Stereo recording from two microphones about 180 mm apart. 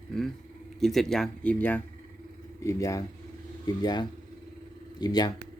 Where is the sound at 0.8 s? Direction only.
Centre (ahead or behind).